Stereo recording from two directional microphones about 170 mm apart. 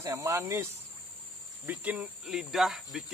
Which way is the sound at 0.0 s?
20° right (ahead or behind).